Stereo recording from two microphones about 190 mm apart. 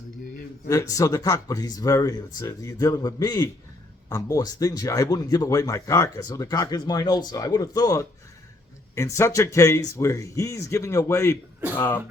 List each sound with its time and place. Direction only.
0.7 s speech: 20° left (ahead or behind)